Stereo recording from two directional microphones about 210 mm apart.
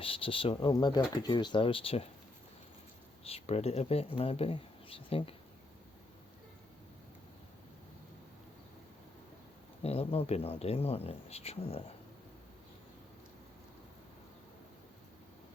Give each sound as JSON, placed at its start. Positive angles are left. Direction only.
{"t": 0.0, "sound": "speech", "side_deg": 25}
{"t": 3.2, "sound": "speech", "side_deg": 30}
{"t": 9.8, "sound": "speech", "side_deg": 30}